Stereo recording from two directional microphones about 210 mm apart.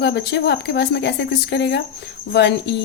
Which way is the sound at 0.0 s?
50° left (ahead or behind).